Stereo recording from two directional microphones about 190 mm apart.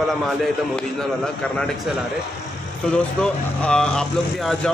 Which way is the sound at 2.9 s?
5° left (ahead or behind).